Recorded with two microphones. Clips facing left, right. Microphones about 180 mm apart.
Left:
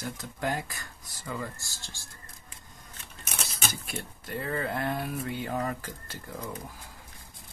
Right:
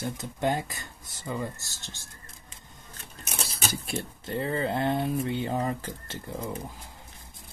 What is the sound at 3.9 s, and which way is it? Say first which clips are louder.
Speech: right 5 dB; 25° right (ahead or behind).